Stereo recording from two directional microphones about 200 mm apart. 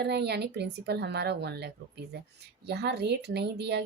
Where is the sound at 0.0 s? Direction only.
55° right (ahead or behind).